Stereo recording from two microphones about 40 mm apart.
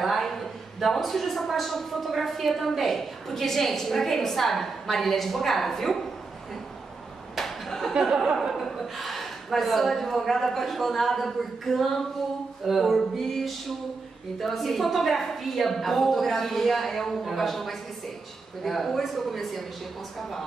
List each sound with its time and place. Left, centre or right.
0.0 s a man's voice: centre
7.3 s clapping: centre
8.1 s chuckle: centre
8.4 s a man's voice: centre